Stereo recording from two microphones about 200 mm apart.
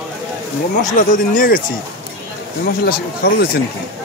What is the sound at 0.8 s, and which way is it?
Speech, 40° left (ahead or behind).